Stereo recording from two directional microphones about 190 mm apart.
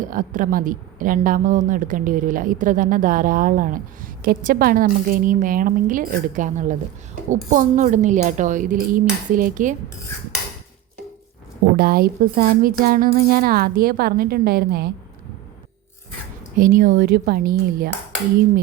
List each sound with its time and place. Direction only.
0.1 s speech: 45° right (ahead or behind)
11.8 s speech: 50° right (ahead or behind)
16.6 s speech: 45° right (ahead or behind)